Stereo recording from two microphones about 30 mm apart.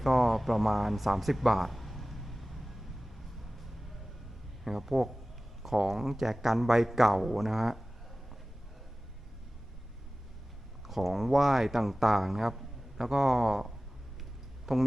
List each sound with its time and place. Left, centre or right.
0.0 s music: centre
4.6 s speech: centre
5.7 s speech: centre
10.8 s speech: centre